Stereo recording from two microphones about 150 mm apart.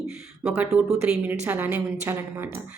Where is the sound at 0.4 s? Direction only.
10° right (ahead or behind).